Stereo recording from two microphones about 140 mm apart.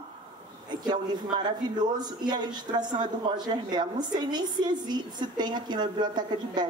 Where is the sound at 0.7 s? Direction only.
30° right (ahead or behind).